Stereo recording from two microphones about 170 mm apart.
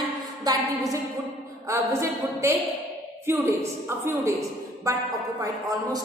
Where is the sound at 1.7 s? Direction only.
15° right (ahead or behind).